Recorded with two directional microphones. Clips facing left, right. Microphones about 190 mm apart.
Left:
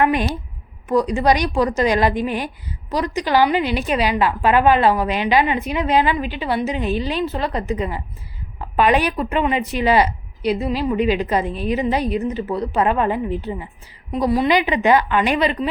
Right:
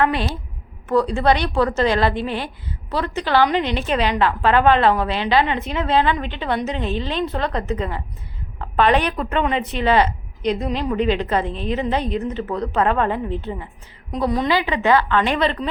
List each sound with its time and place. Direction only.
0.0 s a woman's voice: 15° left (ahead or behind)